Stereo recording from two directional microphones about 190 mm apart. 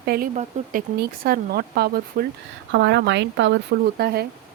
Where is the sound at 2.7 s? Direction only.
65° right (ahead or behind).